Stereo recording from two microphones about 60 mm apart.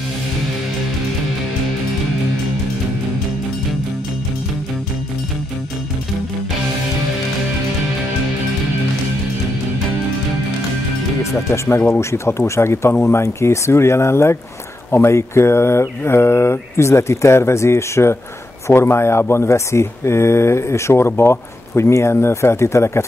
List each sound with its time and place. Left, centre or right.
11.3 s speech: left